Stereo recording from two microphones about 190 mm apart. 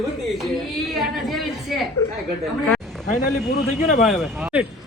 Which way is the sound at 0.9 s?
Centre (ahead or behind).